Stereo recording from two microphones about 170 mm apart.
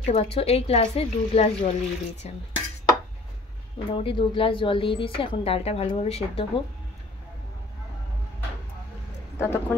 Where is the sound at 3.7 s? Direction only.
30° left (ahead or behind).